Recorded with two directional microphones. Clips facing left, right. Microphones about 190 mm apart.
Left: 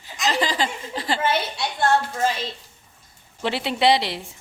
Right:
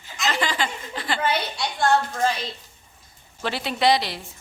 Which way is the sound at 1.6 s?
5° left (ahead or behind).